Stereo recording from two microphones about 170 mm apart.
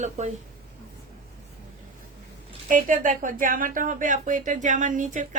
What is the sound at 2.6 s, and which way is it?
Speech, 50° right (ahead or behind).